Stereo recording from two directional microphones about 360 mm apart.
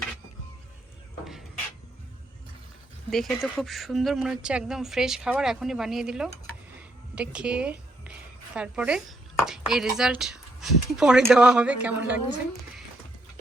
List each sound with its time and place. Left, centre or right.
3.1 s a woman's voice: centre